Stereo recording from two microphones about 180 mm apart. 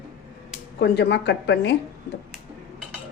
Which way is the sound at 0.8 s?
65° left (ahead or behind).